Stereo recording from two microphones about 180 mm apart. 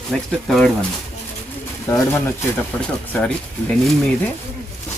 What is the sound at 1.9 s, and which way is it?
Speech, 15° left (ahead or behind).